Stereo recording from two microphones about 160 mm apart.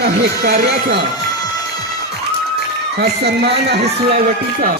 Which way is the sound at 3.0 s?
90° right.